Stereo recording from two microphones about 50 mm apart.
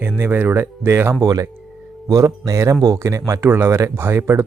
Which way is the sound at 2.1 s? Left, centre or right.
Right.